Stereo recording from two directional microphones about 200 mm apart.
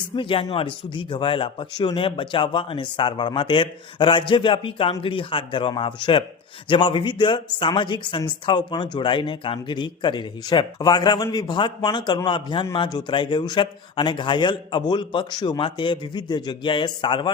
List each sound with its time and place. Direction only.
0.2 s speech: 25° left (ahead or behind)